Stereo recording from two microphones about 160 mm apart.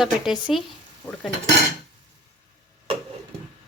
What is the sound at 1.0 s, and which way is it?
Stir, 20° left (ahead or behind).